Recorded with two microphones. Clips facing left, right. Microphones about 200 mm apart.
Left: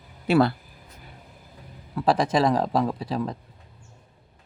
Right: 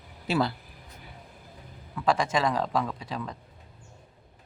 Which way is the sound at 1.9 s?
35° left (ahead or behind).